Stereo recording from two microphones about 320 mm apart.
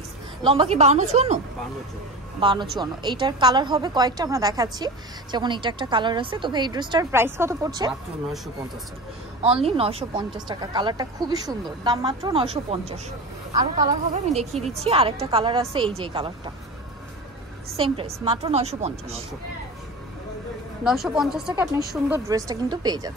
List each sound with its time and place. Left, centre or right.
0.4 s a woman's voice: centre
2.8 s a woman's voice: centre
9.4 s a woman's voice: centre
17.7 s a woman's voice: centre
20.8 s a woman's voice: centre